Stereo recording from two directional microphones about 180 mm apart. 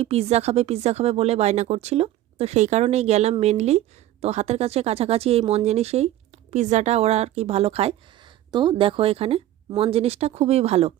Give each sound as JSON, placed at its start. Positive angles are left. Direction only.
{"t": 0.0, "sound": "speech", "side_deg": -35}